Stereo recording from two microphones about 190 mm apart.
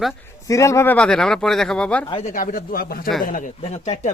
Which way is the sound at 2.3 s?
45° left (ahead or behind).